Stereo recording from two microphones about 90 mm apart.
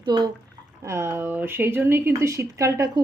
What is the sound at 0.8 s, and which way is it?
Speech, 30° right (ahead or behind).